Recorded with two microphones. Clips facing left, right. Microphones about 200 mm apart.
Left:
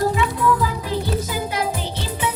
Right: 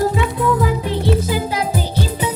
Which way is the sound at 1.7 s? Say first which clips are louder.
Right 6 dB; 35° right (ahead or behind).